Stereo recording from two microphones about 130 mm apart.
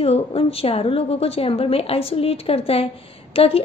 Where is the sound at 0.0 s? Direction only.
50° left (ahead or behind).